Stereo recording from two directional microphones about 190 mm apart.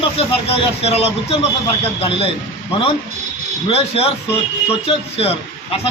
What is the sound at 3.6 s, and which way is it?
Speech, 30° left (ahead or behind).